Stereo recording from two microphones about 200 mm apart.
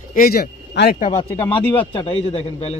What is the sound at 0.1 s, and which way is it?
Speech, 45° left (ahead or behind).